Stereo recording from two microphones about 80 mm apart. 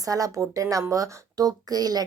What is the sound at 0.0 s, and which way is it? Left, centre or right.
A woman's voice, right.